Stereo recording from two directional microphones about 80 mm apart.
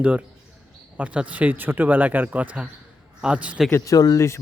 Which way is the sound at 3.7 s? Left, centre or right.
Left.